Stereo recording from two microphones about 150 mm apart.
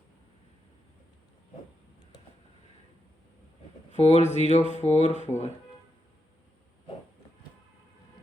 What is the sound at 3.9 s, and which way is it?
Speech, 50° left (ahead or behind).